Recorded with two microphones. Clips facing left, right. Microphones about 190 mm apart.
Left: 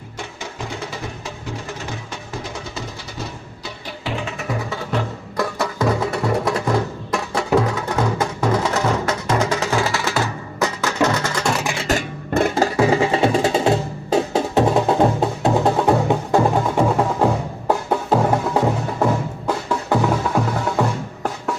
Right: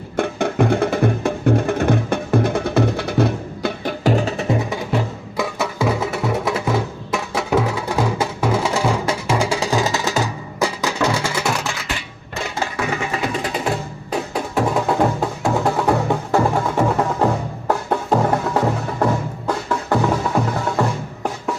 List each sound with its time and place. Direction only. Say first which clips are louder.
0.2 s music: right 14 dB; 60° right (ahead or behind); by 11.5 s 10° right (ahead or behind)
11.9 s music: left 9 dB; 50° left (ahead or behind)
12.7 s music: left 7 dB; 30° left (ahead or behind); by 21.5 s centre (ahead or behind)